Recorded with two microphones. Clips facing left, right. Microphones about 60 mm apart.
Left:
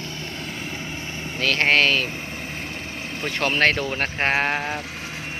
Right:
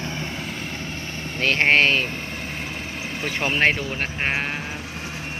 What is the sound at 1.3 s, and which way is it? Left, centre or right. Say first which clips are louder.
Speech: right 1 dB; right.